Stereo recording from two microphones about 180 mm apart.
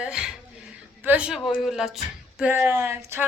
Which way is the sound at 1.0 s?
10° right (ahead or behind).